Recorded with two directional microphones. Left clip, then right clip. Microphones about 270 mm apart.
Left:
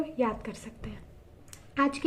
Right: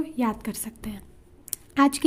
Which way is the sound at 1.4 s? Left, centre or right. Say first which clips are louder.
Right 6 dB; right.